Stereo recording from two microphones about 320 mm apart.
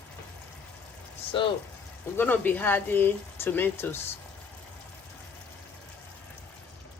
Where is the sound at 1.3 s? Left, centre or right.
Centre.